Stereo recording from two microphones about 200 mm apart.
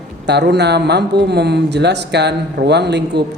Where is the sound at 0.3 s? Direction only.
55° right (ahead or behind).